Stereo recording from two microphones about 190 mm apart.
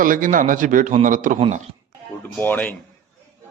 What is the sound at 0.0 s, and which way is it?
A man's voice, 45° right (ahead or behind).